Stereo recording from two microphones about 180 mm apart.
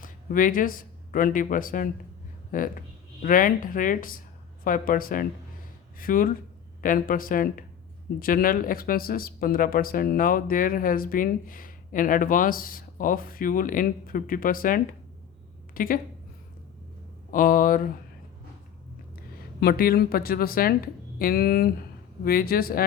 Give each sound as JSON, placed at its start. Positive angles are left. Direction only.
{"t": 0.0, "sound": "a woman's voice", "side_deg": 50}
{"t": 17.3, "sound": "speech", "side_deg": 50}
{"t": 19.5, "sound": "speech", "side_deg": 55}